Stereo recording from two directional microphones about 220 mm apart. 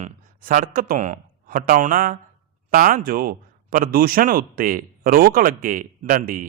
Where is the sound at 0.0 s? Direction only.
40° right (ahead or behind).